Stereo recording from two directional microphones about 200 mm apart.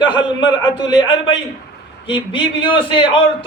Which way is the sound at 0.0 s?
20° left (ahead or behind).